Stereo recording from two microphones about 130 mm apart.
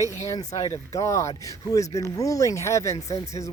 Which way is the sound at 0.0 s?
25° left (ahead or behind).